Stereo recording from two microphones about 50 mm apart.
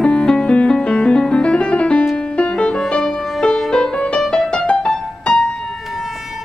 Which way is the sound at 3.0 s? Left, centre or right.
Centre.